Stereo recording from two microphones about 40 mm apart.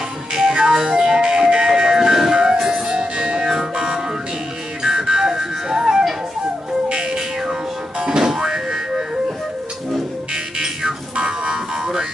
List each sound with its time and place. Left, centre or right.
0.3 s music: centre
2.9 s music: right
5.0 s music: centre
10.3 s buzzer: centre